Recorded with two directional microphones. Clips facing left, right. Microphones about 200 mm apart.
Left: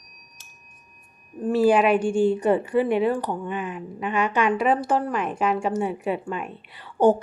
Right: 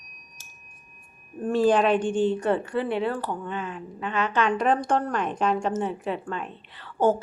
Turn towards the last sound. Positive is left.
turn(degrees=15)  # may be behind; listen again after turning